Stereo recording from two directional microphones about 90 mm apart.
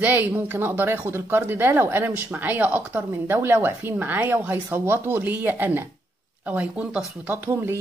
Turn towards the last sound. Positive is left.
turn(degrees=-25)  # may be behind; listen again after turning